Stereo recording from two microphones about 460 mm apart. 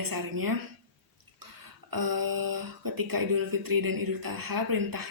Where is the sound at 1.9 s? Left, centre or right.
Right.